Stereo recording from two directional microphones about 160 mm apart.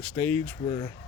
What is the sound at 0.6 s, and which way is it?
Speech, 25° left (ahead or behind).